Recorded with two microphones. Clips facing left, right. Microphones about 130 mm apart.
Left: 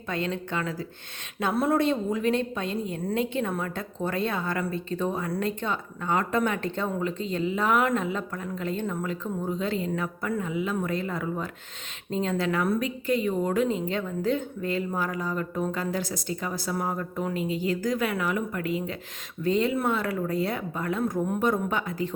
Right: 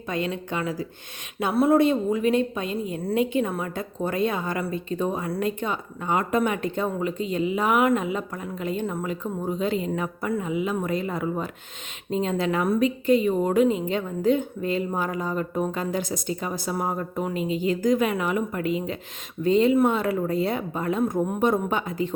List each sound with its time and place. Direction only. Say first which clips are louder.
0.1 s a woman's voice: right 2 dB; 15° right (ahead or behind)